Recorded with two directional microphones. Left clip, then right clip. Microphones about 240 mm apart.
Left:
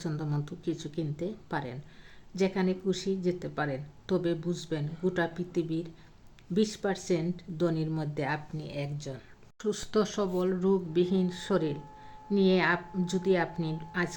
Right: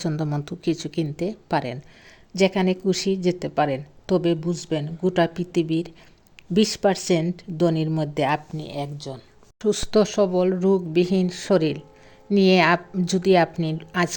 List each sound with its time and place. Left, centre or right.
0.0 s a woman's voice: right